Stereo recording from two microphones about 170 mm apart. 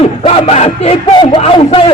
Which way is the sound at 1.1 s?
25° left (ahead or behind).